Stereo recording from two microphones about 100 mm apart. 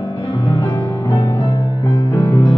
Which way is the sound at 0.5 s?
50° left (ahead or behind).